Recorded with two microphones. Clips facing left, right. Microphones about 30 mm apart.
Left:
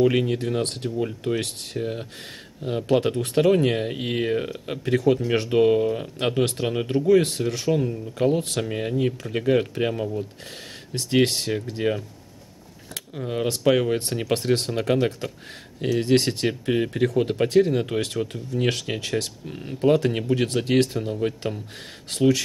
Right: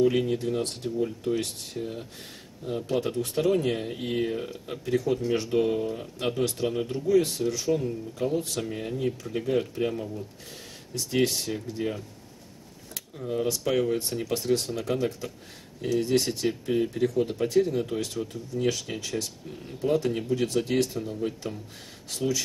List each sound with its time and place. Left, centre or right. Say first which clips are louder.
0.3 s speech: left 3 dB; left